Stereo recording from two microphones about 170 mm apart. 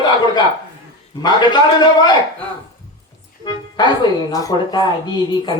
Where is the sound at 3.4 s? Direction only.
25° left (ahead or behind).